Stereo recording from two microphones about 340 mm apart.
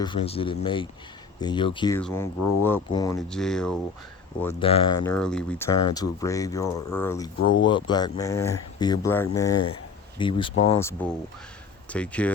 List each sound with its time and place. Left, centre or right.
0.0 s speech: centre
4.4 s speech: centre
5.0 s speech: centre
10.8 s speech: centre